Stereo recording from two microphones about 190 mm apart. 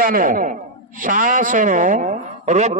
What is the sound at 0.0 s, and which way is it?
A man's voice, 50° right (ahead or behind).